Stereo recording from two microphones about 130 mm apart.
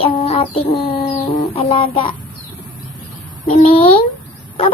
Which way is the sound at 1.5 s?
45° left (ahead or behind).